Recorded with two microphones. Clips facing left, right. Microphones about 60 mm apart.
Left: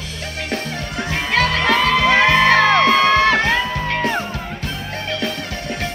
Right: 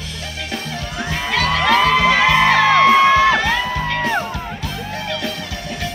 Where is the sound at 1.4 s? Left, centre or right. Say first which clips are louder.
Left 2 dB; left.